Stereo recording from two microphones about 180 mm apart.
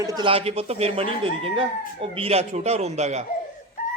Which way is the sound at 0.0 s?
25° right (ahead or behind).